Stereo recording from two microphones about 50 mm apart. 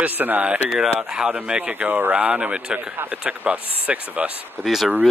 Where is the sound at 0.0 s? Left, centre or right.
Right.